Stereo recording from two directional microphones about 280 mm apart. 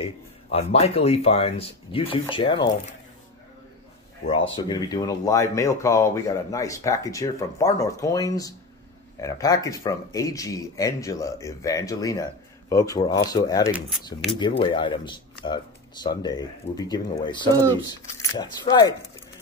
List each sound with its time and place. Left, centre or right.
0.0 s a sound: left
0.7 s speech: left
4.6 s speech: centre
13.7 s speech: centre
14.3 s speech: centre